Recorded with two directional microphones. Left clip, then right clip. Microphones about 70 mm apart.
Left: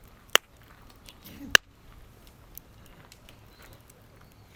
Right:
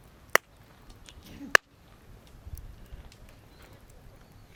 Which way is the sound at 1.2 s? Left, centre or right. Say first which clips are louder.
Even; left.